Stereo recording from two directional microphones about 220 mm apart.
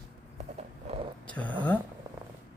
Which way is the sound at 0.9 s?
30° right (ahead or behind).